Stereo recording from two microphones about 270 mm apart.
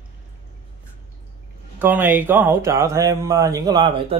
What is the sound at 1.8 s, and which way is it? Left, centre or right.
Speech, centre.